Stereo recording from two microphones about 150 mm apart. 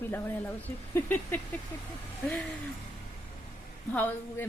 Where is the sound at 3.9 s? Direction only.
10° left (ahead or behind).